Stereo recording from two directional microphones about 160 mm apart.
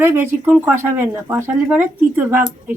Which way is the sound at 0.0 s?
10° right (ahead or behind).